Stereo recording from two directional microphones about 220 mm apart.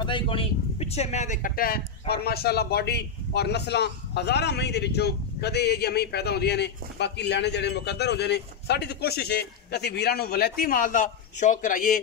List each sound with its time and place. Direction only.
0.0 s speech: 25° left (ahead or behind); by 12.0 s 40° left (ahead or behind)